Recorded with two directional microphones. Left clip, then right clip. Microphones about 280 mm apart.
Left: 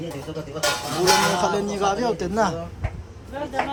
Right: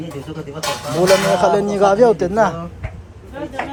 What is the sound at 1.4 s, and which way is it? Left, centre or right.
Speech, centre.